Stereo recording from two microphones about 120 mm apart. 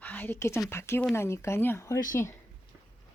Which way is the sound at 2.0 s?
90° left.